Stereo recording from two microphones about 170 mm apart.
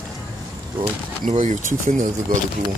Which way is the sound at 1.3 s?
45° right (ahead or behind).